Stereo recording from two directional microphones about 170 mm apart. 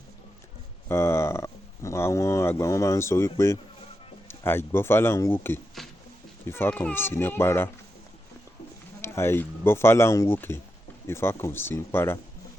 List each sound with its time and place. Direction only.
0.9 s speech: 15° left (ahead or behind)
5.8 s a sound: centre (ahead or behind)
6.5 s speech: 10° left (ahead or behind)
9.0 s speech: 15° left (ahead or behind)